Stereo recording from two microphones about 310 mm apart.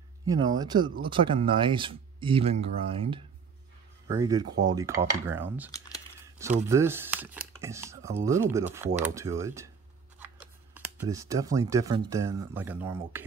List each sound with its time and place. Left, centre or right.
0.2 s speech: centre
6.7 s speech: centre